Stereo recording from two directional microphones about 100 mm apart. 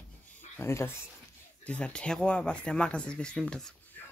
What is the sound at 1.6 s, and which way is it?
Speech, 15° left (ahead or behind).